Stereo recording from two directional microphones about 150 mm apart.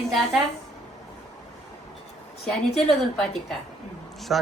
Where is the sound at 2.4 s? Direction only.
Centre (ahead or behind).